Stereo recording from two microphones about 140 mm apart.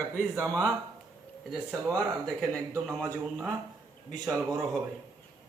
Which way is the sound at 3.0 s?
10° left (ahead or behind).